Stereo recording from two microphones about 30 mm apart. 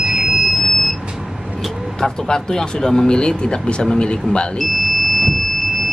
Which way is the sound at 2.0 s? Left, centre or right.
Centre.